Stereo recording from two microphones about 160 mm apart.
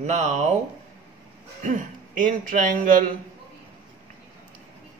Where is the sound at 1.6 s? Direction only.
55° right (ahead or behind).